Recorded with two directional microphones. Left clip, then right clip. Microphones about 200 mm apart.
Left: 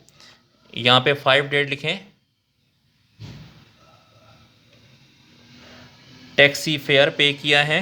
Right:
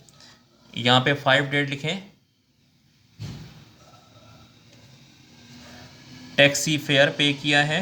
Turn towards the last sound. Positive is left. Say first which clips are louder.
# left 3 dB
turn(degrees=40)  # may be behind; listen again after turning